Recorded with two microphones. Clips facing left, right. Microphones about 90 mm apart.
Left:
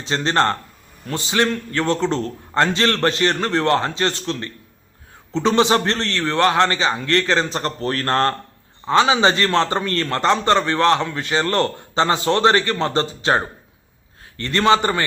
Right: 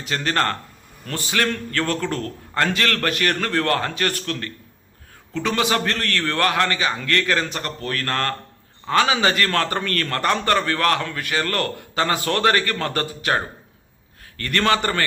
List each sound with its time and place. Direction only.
0.0 s a man's voice: 25° left (ahead or behind)